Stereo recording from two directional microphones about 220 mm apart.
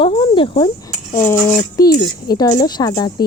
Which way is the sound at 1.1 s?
10° left (ahead or behind).